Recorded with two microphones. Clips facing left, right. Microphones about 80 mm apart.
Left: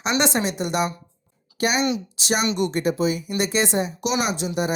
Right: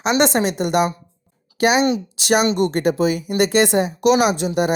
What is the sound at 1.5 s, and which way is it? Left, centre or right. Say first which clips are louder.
Speech: right 6 dB; right.